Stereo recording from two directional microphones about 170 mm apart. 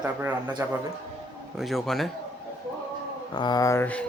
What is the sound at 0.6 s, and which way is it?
Speech, 15° right (ahead or behind).